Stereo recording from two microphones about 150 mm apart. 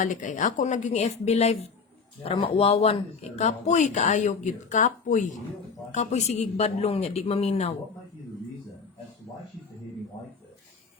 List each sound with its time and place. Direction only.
0.0 s speech: 60° left (ahead or behind)